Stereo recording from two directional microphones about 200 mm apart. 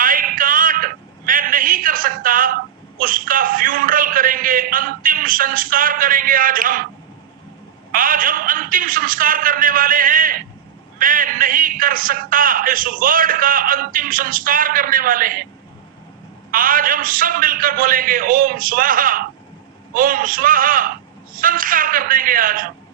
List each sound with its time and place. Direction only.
0.0 s a sound: 45° right (ahead or behind)
3.0 s a man's voice: 45° right (ahead or behind)
7.9 s a man's voice: 45° right (ahead or behind)
16.5 s a man's voice: 45° right (ahead or behind)